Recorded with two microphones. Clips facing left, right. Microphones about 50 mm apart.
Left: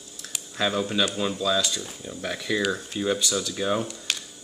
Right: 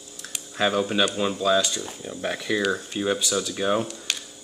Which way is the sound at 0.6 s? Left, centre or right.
Centre.